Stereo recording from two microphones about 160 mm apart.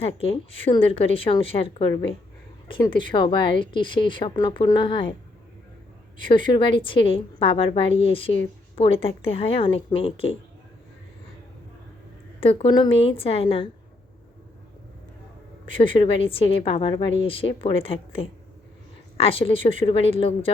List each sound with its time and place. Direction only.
0.0 s a woman's voice: 35° left (ahead or behind)
6.2 s a woman's voice: 30° left (ahead or behind)
12.4 s a woman's voice: 35° left (ahead or behind)
15.8 s a woman's voice: 30° left (ahead or behind)